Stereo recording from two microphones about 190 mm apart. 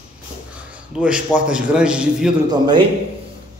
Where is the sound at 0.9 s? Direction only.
5° right (ahead or behind).